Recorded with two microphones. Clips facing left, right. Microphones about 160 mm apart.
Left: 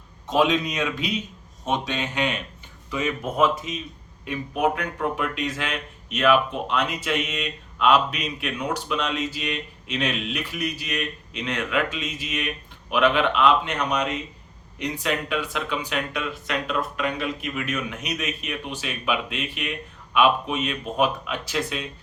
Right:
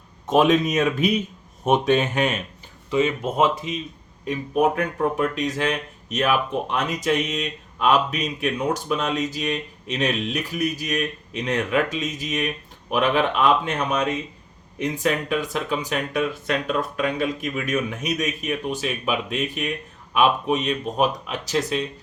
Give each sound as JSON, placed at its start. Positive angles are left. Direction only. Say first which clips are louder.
{"t": 0.3, "sound": "speech", "louder": "right 4 dB", "side_deg": -50}
{"t": 2.9, "sound": "speech", "louder": "right 5 dB", "side_deg": -25}
{"t": 4.3, "sound": "speech", "louder": "right 3 dB", "side_deg": -40}
{"t": 14.9, "sound": "speech", "louder": "right 3 dB", "side_deg": -45}